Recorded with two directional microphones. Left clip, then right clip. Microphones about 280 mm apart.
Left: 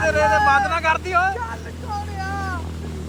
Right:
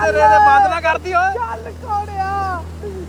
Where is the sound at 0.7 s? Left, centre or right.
Centre.